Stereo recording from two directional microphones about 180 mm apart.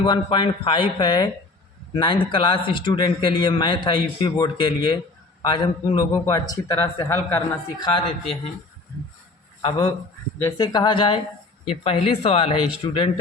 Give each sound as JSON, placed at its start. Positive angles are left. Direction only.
{"t": 0.0, "sound": "a man's voice", "side_deg": 25}
{"t": 9.6, "sound": "a man's voice", "side_deg": 25}